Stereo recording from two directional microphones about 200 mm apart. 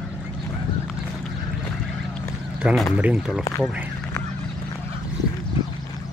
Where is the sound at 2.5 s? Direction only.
5° right (ahead or behind).